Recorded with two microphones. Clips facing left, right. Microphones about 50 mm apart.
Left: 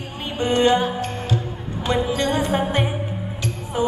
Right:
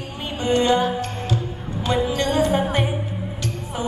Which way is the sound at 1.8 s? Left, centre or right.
Centre.